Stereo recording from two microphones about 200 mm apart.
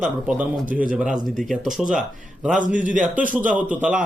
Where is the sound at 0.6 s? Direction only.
40° right (ahead or behind).